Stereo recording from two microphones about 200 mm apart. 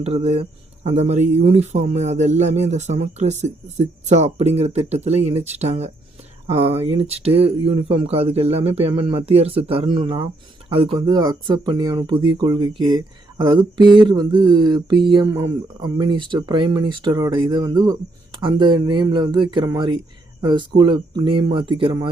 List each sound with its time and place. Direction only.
0.0 s speech: 30° right (ahead or behind)